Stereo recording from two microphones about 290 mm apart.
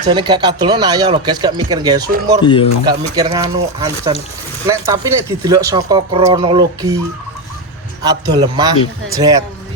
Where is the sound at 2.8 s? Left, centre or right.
Centre.